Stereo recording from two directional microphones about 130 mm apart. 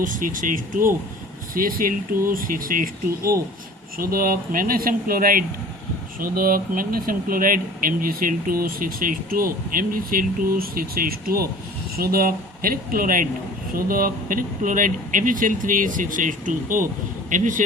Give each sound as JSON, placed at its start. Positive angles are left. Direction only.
{"t": 0.0, "sound": "speech", "side_deg": -90}
{"t": 3.9, "sound": "speech", "side_deg": -90}